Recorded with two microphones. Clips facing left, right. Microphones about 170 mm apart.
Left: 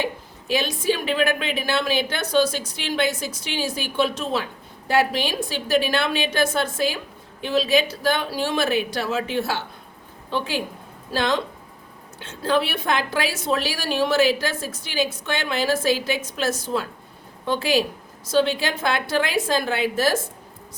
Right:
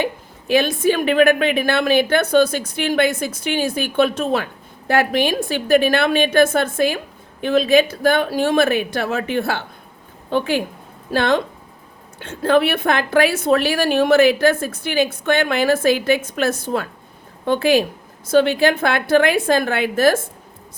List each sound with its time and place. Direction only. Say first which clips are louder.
0.0 s a woman's voice: right 4 dB; 55° right (ahead or behind)